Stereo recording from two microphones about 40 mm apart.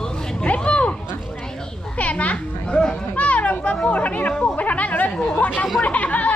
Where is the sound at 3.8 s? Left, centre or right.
Left.